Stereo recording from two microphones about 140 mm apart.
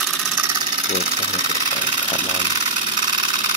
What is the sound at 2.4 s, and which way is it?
Engine, 30° right (ahead or behind).